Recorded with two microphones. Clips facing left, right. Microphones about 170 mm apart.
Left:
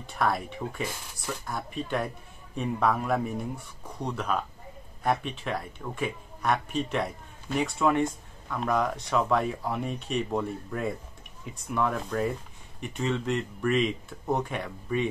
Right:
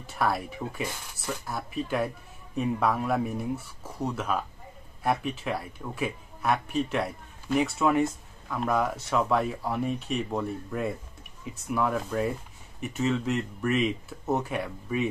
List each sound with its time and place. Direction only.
0.0 s speech: 5° right (ahead or behind)